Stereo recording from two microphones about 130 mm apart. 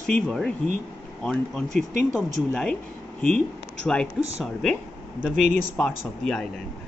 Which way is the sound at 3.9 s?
5° left (ahead or behind).